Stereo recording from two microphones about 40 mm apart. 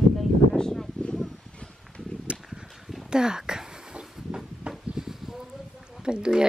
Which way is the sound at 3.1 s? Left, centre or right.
Centre.